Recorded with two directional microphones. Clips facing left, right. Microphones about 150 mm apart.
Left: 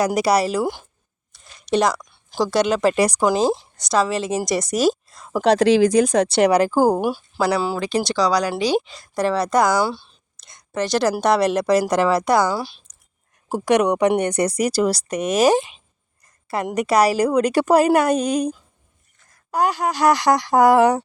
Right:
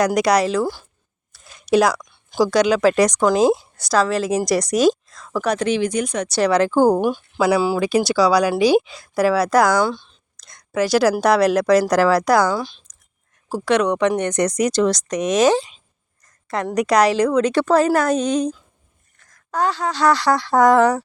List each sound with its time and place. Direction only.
0.0 s speech: 5° left (ahead or behind)
0.6 s speech: 20° left (ahead or behind)
1.6 s speech: 5° right (ahead or behind)
5.9 s speech: 35° left (ahead or behind)
6.5 s speech: 5° left (ahead or behind)
7.4 s speech: 5° right (ahead or behind)
10.4 s a sound: centre (ahead or behind)
11.1 s speech: centre (ahead or behind)